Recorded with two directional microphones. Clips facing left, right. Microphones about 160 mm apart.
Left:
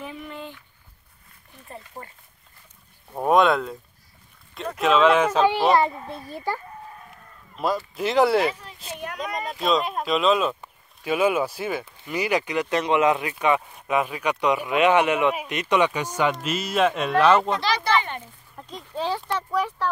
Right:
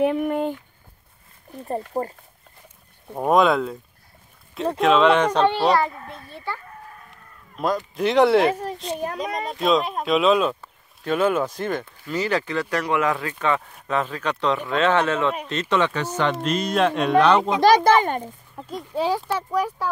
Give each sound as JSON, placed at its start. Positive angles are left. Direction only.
{"t": 0.0, "sound": "speech", "side_deg": -60}
{"t": 1.5, "sound": "speech", "side_deg": -40}
{"t": 3.2, "sound": "speech", "side_deg": 0}
{"t": 4.7, "sound": "speech", "side_deg": 0}
{"t": 5.8, "sound": "a child's voice", "side_deg": 20}
{"t": 6.3, "sound": "a child's voice", "side_deg": 40}
{"t": 7.5, "sound": "speech", "side_deg": 5}
{"t": 8.5, "sound": "speech", "side_deg": -45}
{"t": 8.9, "sound": "speech", "side_deg": -35}
{"t": 9.2, "sound": "speech", "side_deg": 0}
{"t": 17.6, "sound": "speech", "side_deg": -45}
{"t": 18.6, "sound": "speech", "side_deg": -10}